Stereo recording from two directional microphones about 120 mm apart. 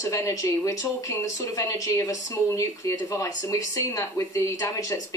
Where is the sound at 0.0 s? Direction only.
25° left (ahead or behind).